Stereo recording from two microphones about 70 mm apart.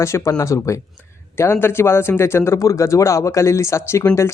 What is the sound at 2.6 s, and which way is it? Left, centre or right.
Speech, left.